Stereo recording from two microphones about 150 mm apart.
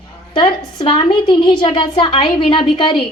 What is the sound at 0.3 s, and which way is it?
A woman's voice, 35° left (ahead or behind).